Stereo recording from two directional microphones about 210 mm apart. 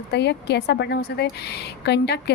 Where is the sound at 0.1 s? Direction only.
55° left (ahead or behind).